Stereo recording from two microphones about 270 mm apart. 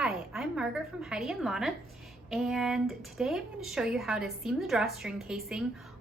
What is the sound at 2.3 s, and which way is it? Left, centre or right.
A woman's voice, centre.